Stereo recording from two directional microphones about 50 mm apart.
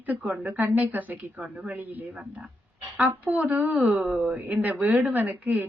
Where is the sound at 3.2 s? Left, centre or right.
Right.